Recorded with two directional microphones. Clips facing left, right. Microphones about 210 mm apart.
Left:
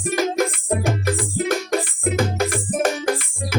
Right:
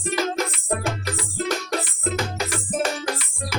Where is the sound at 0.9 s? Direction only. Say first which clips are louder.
Left 6 dB; 50° left (ahead or behind).